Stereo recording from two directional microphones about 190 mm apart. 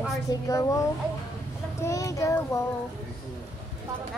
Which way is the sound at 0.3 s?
15° left (ahead or behind).